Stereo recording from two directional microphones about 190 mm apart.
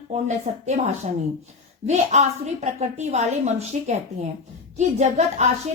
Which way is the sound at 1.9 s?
35° right (ahead or behind).